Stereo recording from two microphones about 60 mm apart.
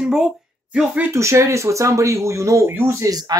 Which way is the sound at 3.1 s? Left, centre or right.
Right.